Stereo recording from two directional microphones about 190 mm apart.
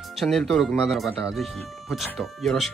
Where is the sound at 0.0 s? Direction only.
Centre (ahead or behind).